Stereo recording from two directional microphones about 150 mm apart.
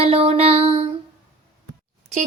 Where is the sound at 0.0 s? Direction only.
40° right (ahead or behind).